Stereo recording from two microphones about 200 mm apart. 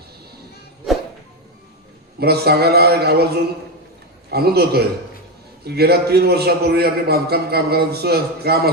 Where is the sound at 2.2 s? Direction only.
50° right (ahead or behind).